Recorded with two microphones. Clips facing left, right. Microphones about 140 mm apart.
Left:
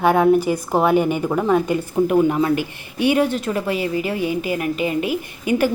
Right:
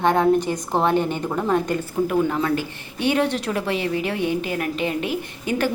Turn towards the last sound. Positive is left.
turn(degrees=10)  # may be behind; listen again after turning